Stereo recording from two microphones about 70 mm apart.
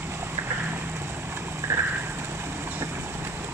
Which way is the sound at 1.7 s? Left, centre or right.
Right.